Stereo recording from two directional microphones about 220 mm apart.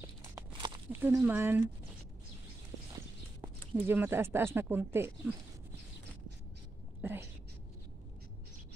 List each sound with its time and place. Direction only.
0.5 s walk: 20° right (ahead or behind)
0.9 s speech: 10° right (ahead or behind)
3.7 s speech: 10° right (ahead or behind)
7.0 s a sound: 10° right (ahead or behind)